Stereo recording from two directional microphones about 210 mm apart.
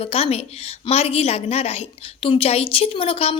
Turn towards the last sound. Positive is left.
turn(degrees=30)  # may be behind; listen again after turning